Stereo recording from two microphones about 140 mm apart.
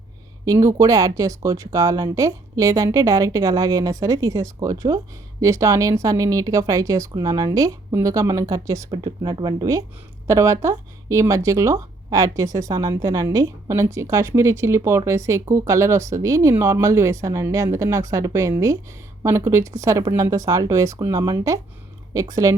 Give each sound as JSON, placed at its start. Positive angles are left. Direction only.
{"t": 0.4, "sound": "a woman's voice", "side_deg": -25}